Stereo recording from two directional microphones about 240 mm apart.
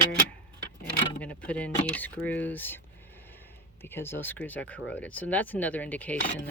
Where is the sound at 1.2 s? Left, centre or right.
Centre.